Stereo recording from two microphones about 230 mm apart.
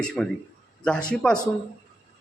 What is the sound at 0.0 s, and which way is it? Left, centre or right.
Speech, centre.